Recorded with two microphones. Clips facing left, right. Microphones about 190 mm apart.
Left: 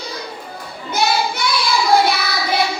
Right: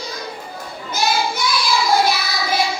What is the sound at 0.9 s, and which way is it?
Child singing, 60° left (ahead or behind).